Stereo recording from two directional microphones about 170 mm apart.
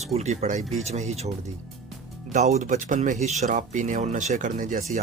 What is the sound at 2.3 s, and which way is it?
Speech, 45° right (ahead or behind).